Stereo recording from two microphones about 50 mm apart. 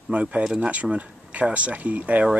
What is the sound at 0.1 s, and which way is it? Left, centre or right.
Speech, right.